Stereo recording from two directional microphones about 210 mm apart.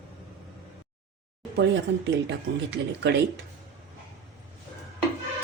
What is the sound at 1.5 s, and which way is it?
A woman's voice, 55° right (ahead or behind).